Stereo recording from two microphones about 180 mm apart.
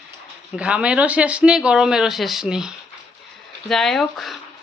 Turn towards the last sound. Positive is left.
turn(degrees=0)  # may be behind; listen again after turning